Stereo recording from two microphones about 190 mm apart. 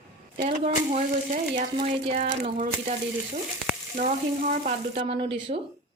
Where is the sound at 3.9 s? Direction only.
40° right (ahead or behind).